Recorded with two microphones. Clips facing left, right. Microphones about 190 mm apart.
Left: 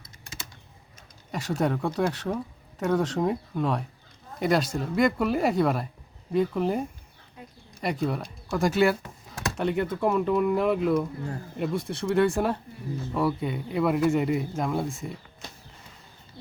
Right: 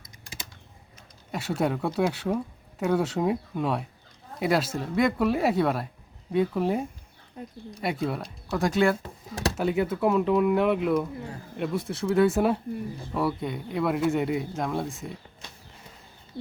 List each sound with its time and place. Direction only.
1.3 s speech: 5° right (ahead or behind)
9.0 s a sound: 35° right (ahead or behind)
9.6 s speech: 5° right (ahead or behind)